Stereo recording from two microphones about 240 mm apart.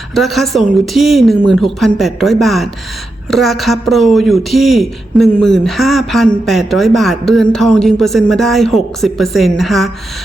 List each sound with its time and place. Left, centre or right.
0.1 s a man's voice: centre